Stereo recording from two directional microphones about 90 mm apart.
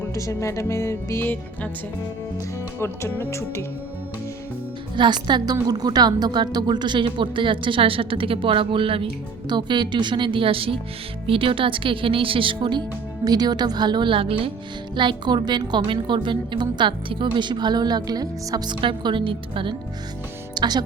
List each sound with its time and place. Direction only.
0.0 s music: 35° left (ahead or behind)
2.8 s music: 30° left (ahead or behind)
4.9 s a woman's voice: 55° right (ahead or behind); by 9.0 s 80° right
9.5 s a woman's voice: 55° right (ahead or behind); by 10.8 s 90° right
11.3 s speech: 80° right
13.2 s speech: 50° right (ahead or behind); by 14.5 s 90° right
14.9 s a woman's voice: 60° right (ahead or behind); by 19.7 s 75° right (ahead or behind)
20.6 s speech: 50° right (ahead or behind)